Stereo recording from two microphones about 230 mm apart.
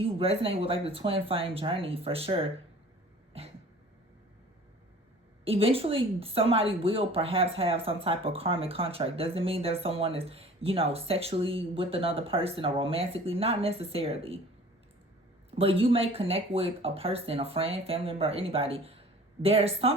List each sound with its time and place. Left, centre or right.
0.2 s speech: right
3.3 s cough: right
5.5 s speech: right
15.4 s speech: right